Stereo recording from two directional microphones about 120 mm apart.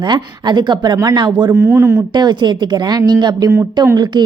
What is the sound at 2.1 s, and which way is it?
A woman's voice, 35° right (ahead or behind).